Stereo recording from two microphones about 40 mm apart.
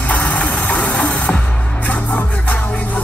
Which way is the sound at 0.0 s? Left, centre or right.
Left.